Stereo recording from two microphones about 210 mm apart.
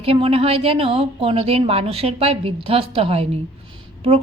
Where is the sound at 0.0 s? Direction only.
25° right (ahead or behind).